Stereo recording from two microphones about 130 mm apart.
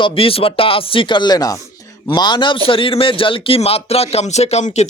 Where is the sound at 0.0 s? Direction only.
45° left (ahead or behind).